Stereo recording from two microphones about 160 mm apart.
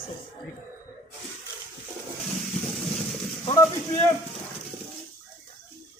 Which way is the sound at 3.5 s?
15° left (ahead or behind).